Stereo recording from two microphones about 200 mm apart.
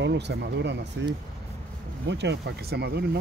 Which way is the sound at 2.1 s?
60° right (ahead or behind).